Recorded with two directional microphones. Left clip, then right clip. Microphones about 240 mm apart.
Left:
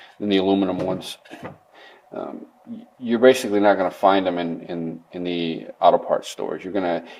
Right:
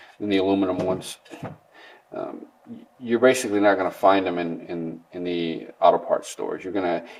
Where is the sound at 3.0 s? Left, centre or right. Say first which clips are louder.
Left 3 dB; left.